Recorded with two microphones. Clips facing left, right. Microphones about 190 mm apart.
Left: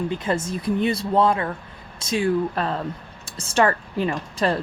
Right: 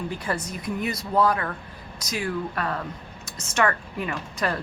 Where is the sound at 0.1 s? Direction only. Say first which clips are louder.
Left 5 dB; 20° left (ahead or behind).